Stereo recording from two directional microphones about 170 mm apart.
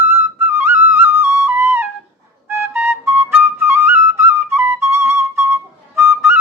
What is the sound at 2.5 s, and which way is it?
Flute, 15° right (ahead or behind).